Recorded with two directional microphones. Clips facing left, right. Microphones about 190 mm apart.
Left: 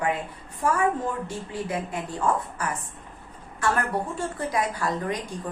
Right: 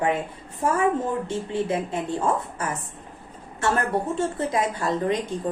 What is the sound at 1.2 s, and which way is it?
Speech, 25° right (ahead or behind).